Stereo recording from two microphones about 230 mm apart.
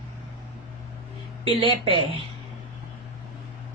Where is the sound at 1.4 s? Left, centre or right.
Right.